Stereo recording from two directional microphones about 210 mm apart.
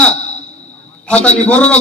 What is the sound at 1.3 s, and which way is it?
Speech, 5° left (ahead or behind).